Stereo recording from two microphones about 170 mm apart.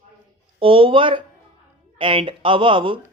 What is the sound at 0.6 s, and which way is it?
Speech, 30° right (ahead or behind).